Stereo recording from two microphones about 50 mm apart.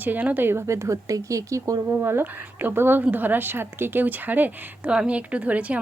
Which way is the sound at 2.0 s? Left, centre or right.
Right.